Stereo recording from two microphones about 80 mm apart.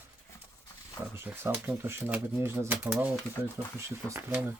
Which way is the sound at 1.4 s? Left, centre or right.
Right.